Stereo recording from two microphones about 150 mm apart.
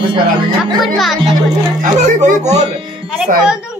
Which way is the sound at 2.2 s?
50° right (ahead or behind).